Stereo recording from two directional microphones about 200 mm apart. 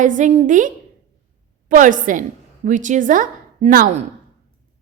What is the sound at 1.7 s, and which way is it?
A woman's voice, 40° right (ahead or behind).